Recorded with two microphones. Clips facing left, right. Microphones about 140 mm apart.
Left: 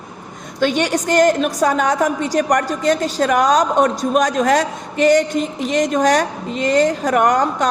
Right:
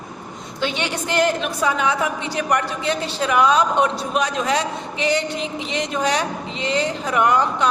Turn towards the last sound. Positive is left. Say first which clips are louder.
# left 2 dB
turn(degrees=45)  # may be behind; listen again after turning